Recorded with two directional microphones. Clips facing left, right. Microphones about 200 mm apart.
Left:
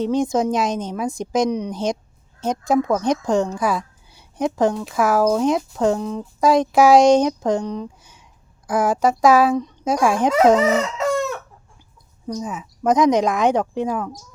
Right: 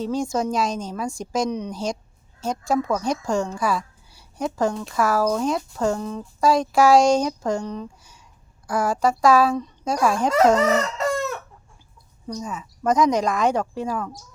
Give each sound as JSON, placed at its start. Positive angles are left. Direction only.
{"t": 0.0, "sound": "speech", "side_deg": 20}
{"t": 4.7, "sound": "speech", "side_deg": 5}
{"t": 4.9, "sound": "speech", "side_deg": 20}
{"t": 5.7, "sound": "a woman's voice", "side_deg": 5}
{"t": 10.2, "sound": "chicken", "side_deg": 0}
{"t": 12.4, "sound": "speech", "side_deg": 20}